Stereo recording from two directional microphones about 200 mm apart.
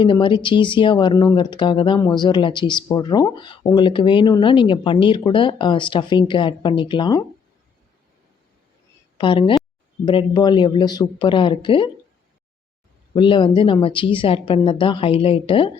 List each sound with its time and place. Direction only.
0.0 s speech: 25° left (ahead or behind)
9.1 s a woman's voice: 25° left (ahead or behind)
13.1 s speech: 25° left (ahead or behind)